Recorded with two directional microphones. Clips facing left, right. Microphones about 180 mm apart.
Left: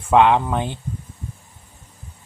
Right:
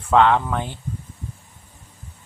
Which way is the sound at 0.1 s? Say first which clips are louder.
Left 2 dB; 15° left (ahead or behind).